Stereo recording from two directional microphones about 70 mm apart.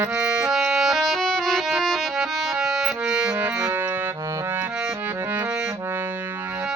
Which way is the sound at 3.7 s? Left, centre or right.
Right.